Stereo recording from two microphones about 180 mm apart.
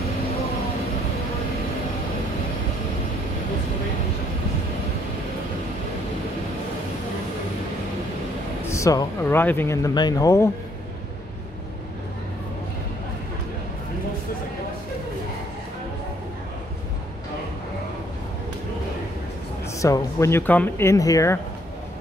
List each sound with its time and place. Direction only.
8.6 s speech: 15° left (ahead or behind)
19.8 s speech: 15° left (ahead or behind)